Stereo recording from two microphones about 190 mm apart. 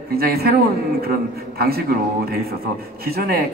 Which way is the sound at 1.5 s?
55° right (ahead or behind).